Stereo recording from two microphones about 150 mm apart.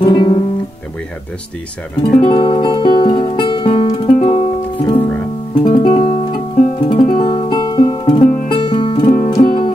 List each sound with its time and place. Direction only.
0.0 s guitar: 30° left (ahead or behind)
2.1 s music: 30° left (ahead or behind)
5.5 s music: 30° left (ahead or behind)